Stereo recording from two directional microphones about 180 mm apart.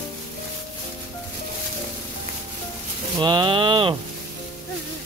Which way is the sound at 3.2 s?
25° right (ahead or behind).